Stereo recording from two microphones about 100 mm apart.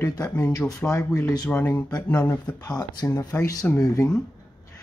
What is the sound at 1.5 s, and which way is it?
Speech, 20° left (ahead or behind).